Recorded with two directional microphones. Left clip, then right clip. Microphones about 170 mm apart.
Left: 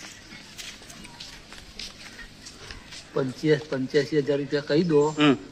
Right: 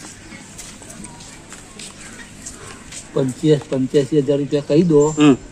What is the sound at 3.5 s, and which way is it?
Speech, 40° left (ahead or behind).